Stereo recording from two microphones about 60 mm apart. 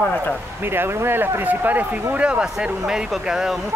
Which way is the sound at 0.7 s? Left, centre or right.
Right.